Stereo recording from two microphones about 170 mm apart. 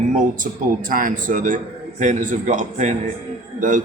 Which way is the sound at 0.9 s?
55° right (ahead or behind).